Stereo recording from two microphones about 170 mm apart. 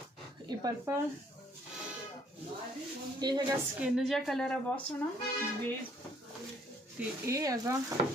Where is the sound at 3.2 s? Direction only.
25° right (ahead or behind).